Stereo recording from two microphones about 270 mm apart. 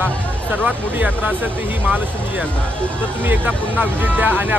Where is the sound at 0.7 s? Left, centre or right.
Centre.